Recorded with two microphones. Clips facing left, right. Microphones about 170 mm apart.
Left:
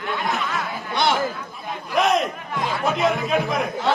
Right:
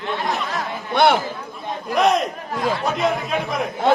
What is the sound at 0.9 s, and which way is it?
Speech, 55° right (ahead or behind).